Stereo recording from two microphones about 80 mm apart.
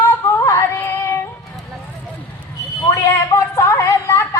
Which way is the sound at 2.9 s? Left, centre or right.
Left.